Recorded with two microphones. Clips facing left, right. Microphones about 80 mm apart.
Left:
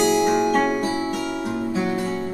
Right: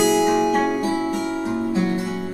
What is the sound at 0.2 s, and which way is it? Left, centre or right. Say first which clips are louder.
Music: right 1 dB; centre.